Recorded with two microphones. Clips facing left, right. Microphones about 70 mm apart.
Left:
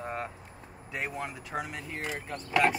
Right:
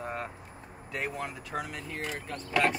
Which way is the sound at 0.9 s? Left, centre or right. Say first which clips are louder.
Even; centre.